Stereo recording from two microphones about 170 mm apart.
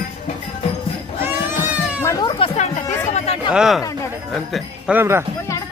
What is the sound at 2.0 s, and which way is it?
Music, 20° left (ahead or behind).